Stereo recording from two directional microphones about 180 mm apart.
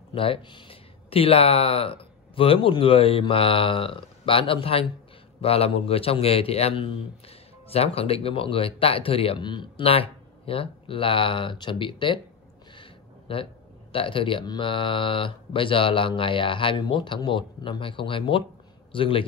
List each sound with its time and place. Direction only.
0.1 s a man's voice: 30° left (ahead or behind)
12.7 s a sound: 30° left (ahead or behind)
13.9 s speech: 30° left (ahead or behind)